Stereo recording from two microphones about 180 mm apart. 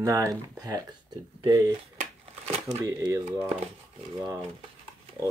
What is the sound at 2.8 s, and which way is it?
Speech, 15° right (ahead or behind).